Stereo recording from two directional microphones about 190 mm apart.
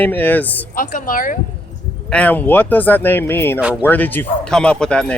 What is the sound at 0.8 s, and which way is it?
Speech, 45° left (ahead or behind).